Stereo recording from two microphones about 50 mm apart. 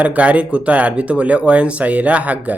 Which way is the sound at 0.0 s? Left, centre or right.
Right.